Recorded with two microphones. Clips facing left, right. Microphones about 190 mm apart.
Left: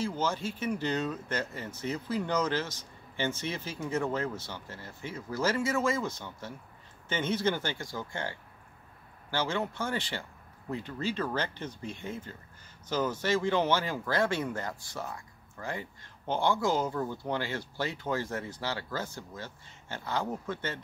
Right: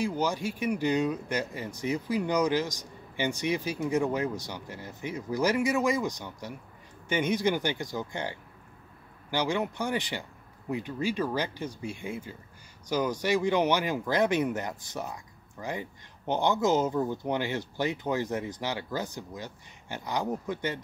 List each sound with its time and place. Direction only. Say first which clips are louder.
0.0 s speech: right 3 dB; 15° right (ahead or behind)